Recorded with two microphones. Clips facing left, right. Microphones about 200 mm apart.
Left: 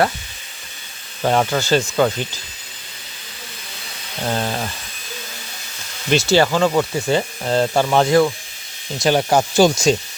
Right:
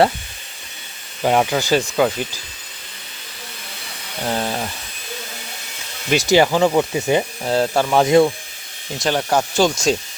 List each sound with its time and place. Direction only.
1.2 s speech: 10° right (ahead or behind)
4.2 s speech: centre (ahead or behind)
6.1 s speech: 15° right (ahead or behind)
7.4 s speech: 5° right (ahead or behind)
8.0 s speech: 20° right (ahead or behind)
9.0 s speech: 10° left (ahead or behind)